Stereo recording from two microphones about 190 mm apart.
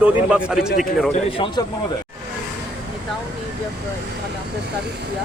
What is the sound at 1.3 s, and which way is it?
Speech, 25° left (ahead or behind).